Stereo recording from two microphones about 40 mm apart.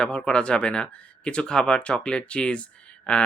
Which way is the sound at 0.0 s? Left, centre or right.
Left.